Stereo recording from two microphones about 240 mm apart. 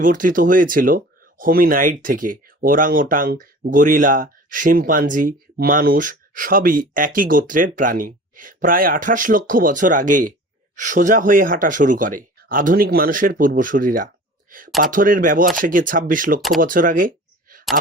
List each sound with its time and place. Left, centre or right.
0.0 s speech: right